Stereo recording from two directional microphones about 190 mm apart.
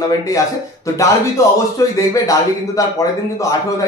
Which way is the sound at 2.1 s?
15° left (ahead or behind).